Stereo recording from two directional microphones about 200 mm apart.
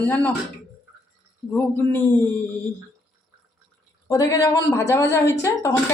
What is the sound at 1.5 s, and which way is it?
Speech, 10° left (ahead or behind).